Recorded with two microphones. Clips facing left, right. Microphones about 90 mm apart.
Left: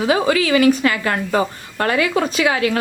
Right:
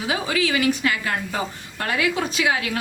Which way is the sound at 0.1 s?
55° left (ahead or behind).